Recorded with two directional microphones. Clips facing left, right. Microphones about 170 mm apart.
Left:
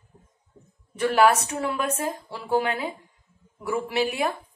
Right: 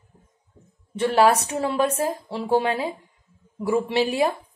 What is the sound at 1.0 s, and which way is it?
A woman's voice, 30° right (ahead or behind).